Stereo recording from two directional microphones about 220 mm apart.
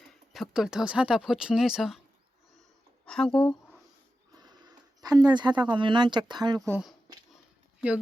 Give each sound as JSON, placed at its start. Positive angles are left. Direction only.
{"t": 0.0, "sound": "speech", "side_deg": 0}
{"t": 3.1, "sound": "speech", "side_deg": 5}
{"t": 4.4, "sound": "a sound", "side_deg": -20}
{"t": 5.7, "sound": "speech", "side_deg": -20}
{"t": 6.7, "sound": "speech", "side_deg": -5}